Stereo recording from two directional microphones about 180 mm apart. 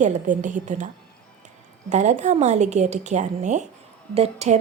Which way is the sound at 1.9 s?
40° right (ahead or behind).